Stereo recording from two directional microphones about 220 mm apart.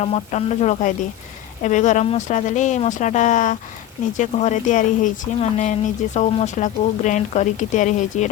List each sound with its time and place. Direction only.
0.0 s speech: 30° left (ahead or behind)